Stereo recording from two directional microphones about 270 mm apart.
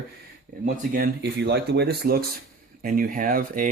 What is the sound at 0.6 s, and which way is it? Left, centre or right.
Speech, right.